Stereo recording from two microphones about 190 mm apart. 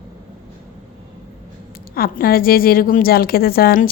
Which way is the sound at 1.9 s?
50° left (ahead or behind).